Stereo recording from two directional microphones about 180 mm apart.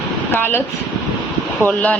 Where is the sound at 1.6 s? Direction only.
10° left (ahead or behind).